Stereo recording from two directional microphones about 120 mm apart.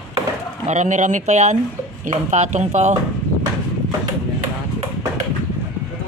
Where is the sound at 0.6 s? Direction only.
85° right.